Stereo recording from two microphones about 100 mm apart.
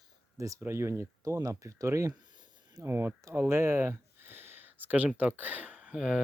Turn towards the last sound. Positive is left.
turn(degrees=-5)  # may be behind; listen again after turning